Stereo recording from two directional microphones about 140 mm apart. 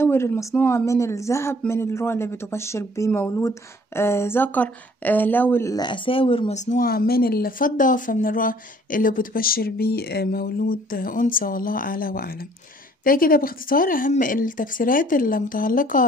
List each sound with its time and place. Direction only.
0.0 s speech: 15° left (ahead or behind)
5.8 s speech: 35° left (ahead or behind)
6.5 s speech: 60° left (ahead or behind)